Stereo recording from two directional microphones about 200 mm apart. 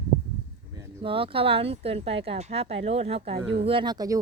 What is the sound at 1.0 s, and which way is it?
Speech, 25° right (ahead or behind).